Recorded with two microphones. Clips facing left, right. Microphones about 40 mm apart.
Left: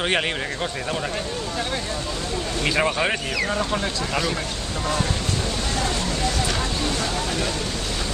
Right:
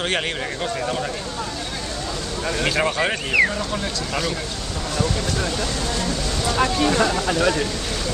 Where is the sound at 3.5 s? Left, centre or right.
Left.